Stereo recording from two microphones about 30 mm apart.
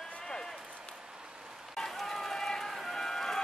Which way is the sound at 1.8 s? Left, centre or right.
Centre.